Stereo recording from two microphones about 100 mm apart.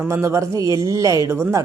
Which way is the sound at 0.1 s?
30° right (ahead or behind).